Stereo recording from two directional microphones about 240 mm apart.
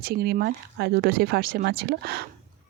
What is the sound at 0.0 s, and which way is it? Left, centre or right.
Speech, right.